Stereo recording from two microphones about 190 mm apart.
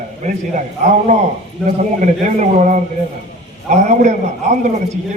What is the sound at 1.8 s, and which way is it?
A man's voice, 40° right (ahead or behind).